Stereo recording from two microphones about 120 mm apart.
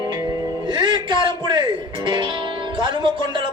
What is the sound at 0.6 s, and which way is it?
Music, 40° right (ahead or behind).